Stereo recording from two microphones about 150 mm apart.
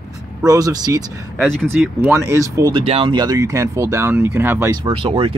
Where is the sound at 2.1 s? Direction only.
15° right (ahead or behind).